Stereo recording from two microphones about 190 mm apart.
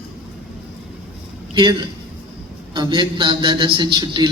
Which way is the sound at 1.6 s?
25° right (ahead or behind).